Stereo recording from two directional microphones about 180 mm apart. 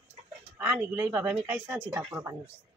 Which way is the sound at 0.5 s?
10° right (ahead or behind).